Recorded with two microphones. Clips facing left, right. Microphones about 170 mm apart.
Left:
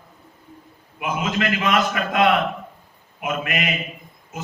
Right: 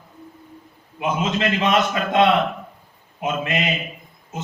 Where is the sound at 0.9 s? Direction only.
25° right (ahead or behind).